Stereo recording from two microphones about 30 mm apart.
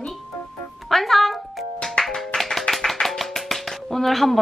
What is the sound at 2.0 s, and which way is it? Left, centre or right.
Music, left.